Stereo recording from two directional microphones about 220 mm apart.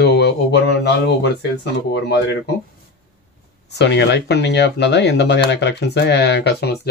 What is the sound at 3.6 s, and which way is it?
Speech, 50° left (ahead or behind).